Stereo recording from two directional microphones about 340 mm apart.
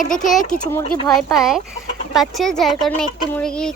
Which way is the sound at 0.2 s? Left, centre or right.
Left.